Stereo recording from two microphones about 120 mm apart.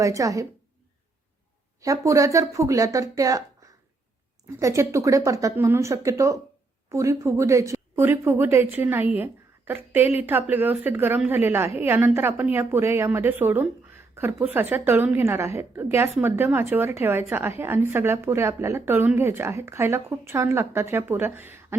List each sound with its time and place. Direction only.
0.0 s speech: 30° right (ahead or behind)
1.8 s speech: 30° right (ahead or behind)
4.6 s a woman's voice: 25° right (ahead or behind)